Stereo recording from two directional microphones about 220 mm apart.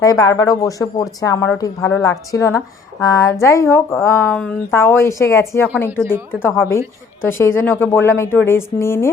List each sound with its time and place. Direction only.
0.0 s a woman's voice: 15° left (ahead or behind)